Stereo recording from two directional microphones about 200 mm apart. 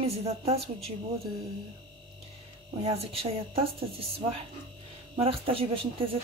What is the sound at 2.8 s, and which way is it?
Speech, 30° right (ahead or behind).